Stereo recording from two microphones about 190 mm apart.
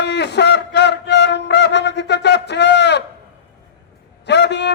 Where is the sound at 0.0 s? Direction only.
65° left (ahead or behind).